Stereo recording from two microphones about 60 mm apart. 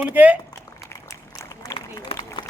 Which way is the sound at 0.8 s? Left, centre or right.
Left.